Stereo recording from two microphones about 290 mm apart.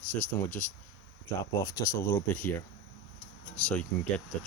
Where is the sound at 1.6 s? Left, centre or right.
Centre.